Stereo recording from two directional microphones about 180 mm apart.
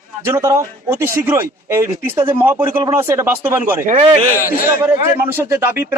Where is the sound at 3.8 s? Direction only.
45° right (ahead or behind).